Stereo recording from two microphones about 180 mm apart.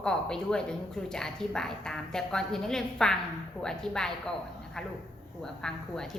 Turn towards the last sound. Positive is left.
turn(degrees=5)  # may be behind; listen again after turning